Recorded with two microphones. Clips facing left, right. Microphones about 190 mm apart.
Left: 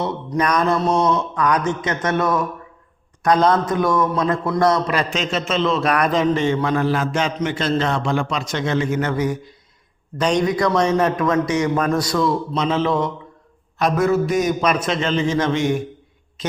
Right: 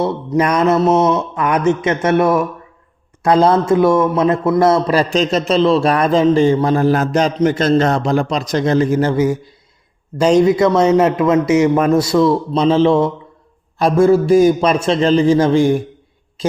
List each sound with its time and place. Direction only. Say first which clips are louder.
0.0 s a man's voice: right 5 dB; 25° right (ahead or behind)